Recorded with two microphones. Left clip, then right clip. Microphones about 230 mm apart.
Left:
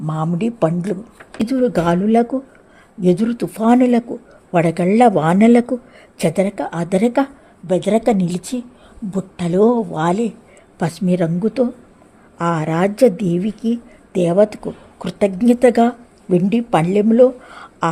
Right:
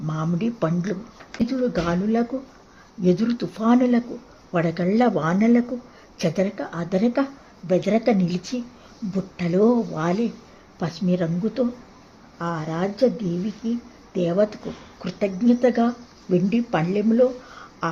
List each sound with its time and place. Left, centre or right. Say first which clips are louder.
0.0 s speech: left 6 dB; centre
1.3 s speech: left 6 dB; left